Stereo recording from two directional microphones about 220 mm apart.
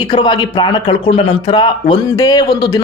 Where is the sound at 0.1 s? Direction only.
20° left (ahead or behind).